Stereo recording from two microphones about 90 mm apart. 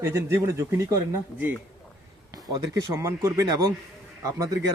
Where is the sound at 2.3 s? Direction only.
45° right (ahead or behind).